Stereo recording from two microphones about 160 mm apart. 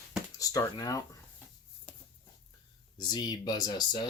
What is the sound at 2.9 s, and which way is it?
Speech, 25° left (ahead or behind).